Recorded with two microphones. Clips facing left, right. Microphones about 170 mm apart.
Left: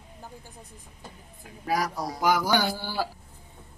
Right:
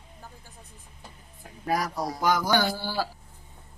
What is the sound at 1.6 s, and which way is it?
Speech, centre (ahead or behind).